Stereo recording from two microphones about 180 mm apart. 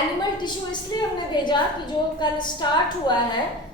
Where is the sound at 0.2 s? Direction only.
25° left (ahead or behind).